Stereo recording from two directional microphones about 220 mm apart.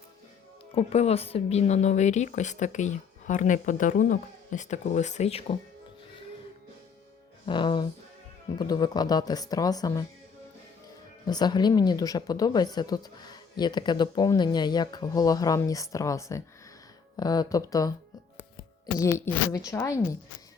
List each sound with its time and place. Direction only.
0.7 s speech: 25° left (ahead or behind)
7.4 s speech: 20° left (ahead or behind)
11.3 s speech: 20° left (ahead or behind)
18.9 s speech: 10° left (ahead or behind)